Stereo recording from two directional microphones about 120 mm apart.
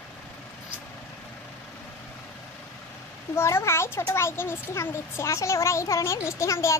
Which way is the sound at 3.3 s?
20° left (ahead or behind).